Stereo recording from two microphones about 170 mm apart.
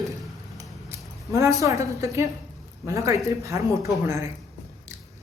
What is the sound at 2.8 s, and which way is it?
Speech, 20° right (ahead or behind).